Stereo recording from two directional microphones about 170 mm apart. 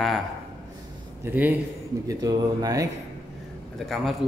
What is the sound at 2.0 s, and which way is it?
Speech, 25° right (ahead or behind).